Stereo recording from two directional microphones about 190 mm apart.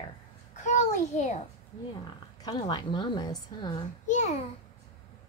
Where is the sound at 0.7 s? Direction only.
40° left (ahead or behind).